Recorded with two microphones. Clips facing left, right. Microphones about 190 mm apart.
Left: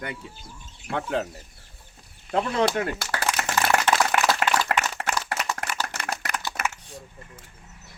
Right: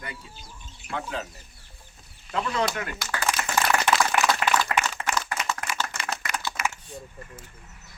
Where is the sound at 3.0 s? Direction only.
70° left (ahead or behind).